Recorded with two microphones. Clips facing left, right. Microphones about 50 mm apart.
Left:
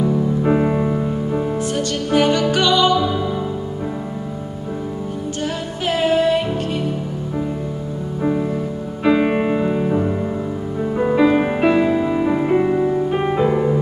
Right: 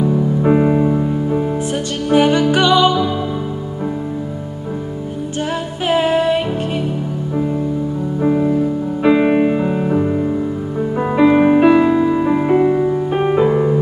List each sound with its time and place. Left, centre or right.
0.0 s music: centre
2.0 s music: centre
5.9 s music: right
8.2 s music: centre